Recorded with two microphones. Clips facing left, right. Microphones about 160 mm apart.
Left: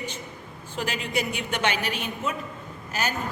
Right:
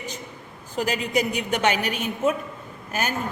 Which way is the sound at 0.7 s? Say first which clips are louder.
Right 5 dB; 40° right (ahead or behind).